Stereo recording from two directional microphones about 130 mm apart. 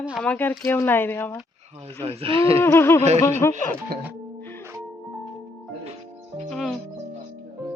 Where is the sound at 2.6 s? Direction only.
20° left (ahead or behind).